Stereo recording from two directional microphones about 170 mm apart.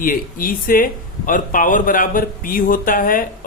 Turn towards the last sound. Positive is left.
turn(degrees=55)  # may be behind; listen again after turning